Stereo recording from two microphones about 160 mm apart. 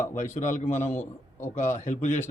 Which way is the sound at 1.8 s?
45° left (ahead or behind).